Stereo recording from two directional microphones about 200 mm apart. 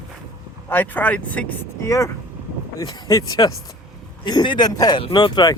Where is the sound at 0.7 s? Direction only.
10° left (ahead or behind).